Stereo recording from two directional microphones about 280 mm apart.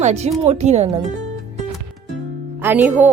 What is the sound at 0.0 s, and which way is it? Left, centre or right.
Speech, right.